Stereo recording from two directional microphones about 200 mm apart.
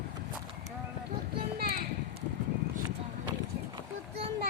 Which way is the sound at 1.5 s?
50° right (ahead or behind).